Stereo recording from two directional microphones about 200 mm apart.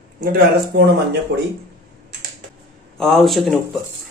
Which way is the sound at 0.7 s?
55° right (ahead or behind).